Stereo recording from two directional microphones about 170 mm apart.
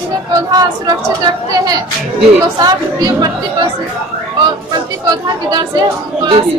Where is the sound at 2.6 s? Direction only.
20° right (ahead or behind).